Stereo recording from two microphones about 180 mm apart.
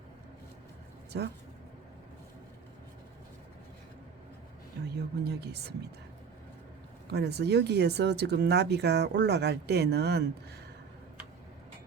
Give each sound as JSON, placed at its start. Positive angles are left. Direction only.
{"t": 1.1, "sound": "speech", "side_deg": -70}
{"t": 5.2, "sound": "speech", "side_deg": -65}
{"t": 7.1, "sound": "speech", "side_deg": -65}